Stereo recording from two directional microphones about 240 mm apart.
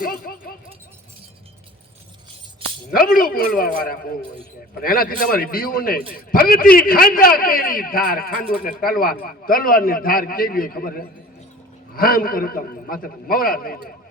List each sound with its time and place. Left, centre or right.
0.0 s speech: left
2.9 s a man's voice: left